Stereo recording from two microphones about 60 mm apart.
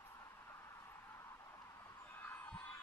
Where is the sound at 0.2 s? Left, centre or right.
Left.